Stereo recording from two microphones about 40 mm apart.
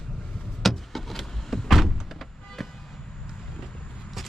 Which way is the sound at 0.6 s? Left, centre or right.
Centre.